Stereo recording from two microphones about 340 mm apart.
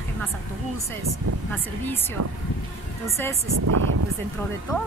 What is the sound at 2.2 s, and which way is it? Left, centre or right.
Speech, right.